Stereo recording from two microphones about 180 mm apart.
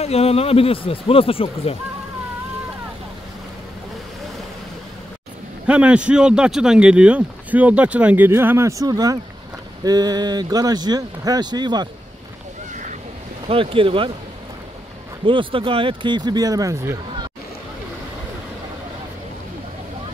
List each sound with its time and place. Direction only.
0.0 s speech: 35° left (ahead or behind)
5.7 s speech: 5° right (ahead or behind); by 11.9 s 25° right (ahead or behind)
13.5 s speech: 30° right (ahead or behind)
15.2 s speech: 30° right (ahead or behind)